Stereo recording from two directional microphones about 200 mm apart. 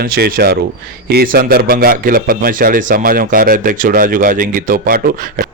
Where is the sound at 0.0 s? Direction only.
50° right (ahead or behind).